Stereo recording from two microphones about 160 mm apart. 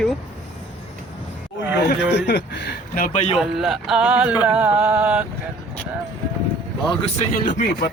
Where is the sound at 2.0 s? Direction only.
90° left; by 3.3 s 45° left (ahead or behind).